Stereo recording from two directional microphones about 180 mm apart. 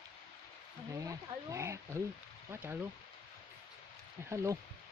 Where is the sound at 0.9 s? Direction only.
15° right (ahead or behind).